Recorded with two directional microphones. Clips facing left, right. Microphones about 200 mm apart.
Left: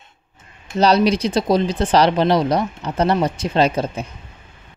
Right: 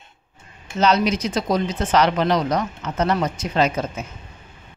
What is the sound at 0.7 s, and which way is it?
Speech, 35° left (ahead or behind).